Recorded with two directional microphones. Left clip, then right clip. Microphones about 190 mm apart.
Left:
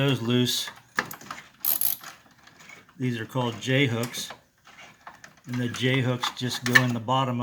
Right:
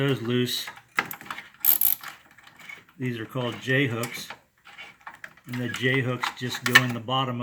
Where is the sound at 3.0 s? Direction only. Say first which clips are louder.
Left 2 dB; 45° left (ahead or behind).